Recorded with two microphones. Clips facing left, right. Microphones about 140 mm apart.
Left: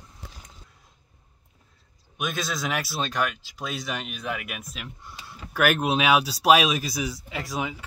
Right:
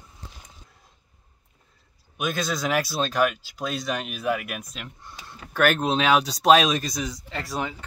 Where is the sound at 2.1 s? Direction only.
Centre (ahead or behind).